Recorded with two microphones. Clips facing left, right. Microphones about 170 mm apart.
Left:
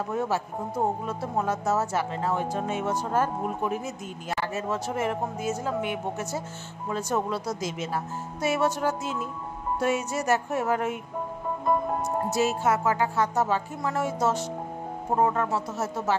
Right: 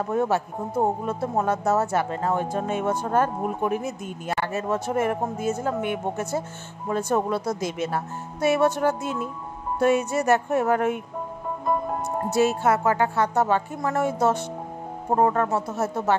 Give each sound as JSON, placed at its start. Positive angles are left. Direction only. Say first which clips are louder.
{"t": 0.1, "sound": "speech", "louder": "right 6 dB", "side_deg": -55}
{"t": 11.6, "sound": "music", "louder": "even", "side_deg": 0}
{"t": 12.3, "sound": "speech", "louder": "right 5 dB", "side_deg": -60}